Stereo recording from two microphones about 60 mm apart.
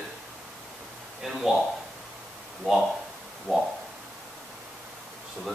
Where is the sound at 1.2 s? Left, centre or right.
Centre.